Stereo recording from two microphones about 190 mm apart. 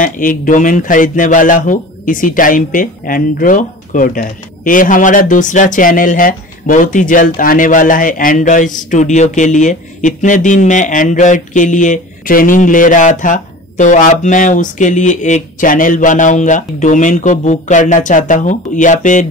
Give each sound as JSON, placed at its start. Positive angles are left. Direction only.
{"t": 0.0, "sound": "speech", "side_deg": 45}